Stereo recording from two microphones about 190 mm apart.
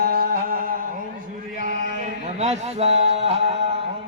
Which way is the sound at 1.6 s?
40° right (ahead or behind).